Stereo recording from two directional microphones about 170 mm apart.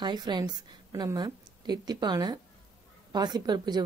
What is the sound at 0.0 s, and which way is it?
Speech, 25° right (ahead or behind).